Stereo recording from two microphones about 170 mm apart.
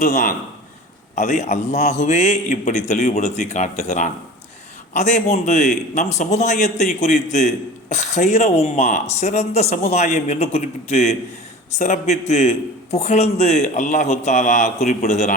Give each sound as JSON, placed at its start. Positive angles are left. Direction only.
{"t": 0.0, "sound": "a man's voice", "side_deg": 50}